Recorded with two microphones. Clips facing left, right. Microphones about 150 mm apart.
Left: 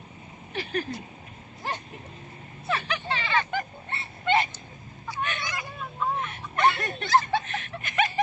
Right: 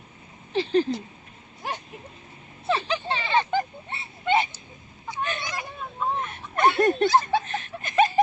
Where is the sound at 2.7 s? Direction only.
30° right (ahead or behind).